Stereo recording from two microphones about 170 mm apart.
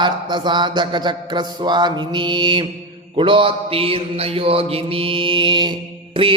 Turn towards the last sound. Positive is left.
turn(degrees=-30)  # may be behind; listen again after turning